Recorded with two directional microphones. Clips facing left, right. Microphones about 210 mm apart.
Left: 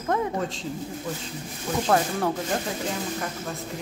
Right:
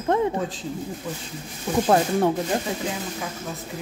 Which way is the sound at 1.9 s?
25° right (ahead or behind).